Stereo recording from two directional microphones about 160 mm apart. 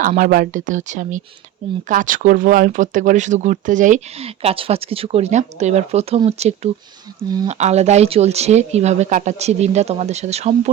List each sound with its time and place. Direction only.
0.2 s speech: 60° right (ahead or behind); by 10.5 s 45° right (ahead or behind)